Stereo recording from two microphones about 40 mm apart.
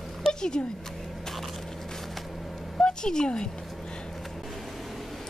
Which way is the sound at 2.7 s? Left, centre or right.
Centre.